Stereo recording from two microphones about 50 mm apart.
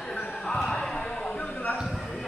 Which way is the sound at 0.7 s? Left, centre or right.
Centre.